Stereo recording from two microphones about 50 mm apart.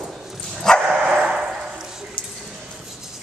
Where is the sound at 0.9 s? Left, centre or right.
Centre.